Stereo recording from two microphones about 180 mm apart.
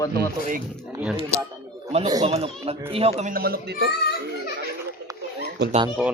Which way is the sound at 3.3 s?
60° right (ahead or behind).